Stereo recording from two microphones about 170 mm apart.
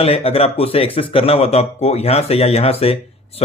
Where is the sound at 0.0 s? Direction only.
35° left (ahead or behind).